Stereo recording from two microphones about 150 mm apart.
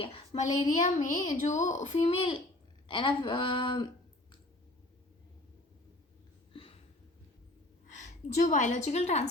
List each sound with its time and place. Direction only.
0.0 s a child's voice: 40° left (ahead or behind)
0.7 s a child's voice: 55° left (ahead or behind)
2.8 s a woman's voice: 35° left (ahead or behind)
6.5 s a sound: 35° left (ahead or behind)
7.9 s a woman's voice: 55° left (ahead or behind)